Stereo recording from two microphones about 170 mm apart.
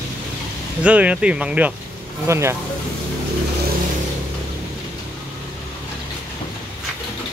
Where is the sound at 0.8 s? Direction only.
5° right (ahead or behind).